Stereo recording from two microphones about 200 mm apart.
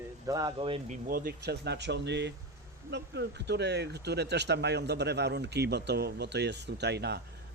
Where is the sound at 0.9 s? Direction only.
45° right (ahead or behind).